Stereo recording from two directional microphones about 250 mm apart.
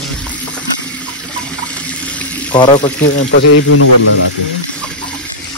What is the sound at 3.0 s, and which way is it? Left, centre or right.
Speech, left.